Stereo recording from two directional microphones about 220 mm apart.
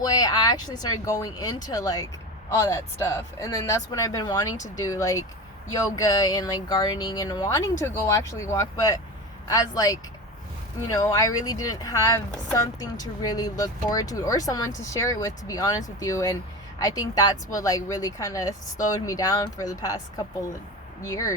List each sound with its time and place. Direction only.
0.0 s speech: 15° left (ahead or behind)